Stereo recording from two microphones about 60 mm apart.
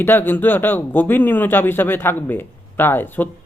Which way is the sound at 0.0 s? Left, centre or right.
Left.